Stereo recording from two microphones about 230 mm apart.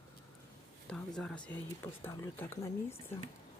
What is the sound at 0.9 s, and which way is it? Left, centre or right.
Speech, centre.